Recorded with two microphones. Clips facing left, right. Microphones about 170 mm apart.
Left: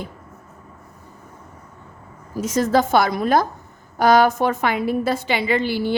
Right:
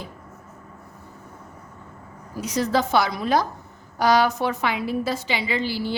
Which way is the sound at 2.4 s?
50° left (ahead or behind).